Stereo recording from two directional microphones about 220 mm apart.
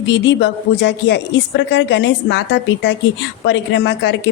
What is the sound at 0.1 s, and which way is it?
Speech, 55° left (ahead or behind).